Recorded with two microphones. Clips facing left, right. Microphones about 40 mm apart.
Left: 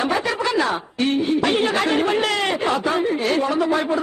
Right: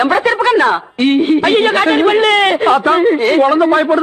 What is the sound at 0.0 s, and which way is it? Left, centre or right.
A man's voice, right.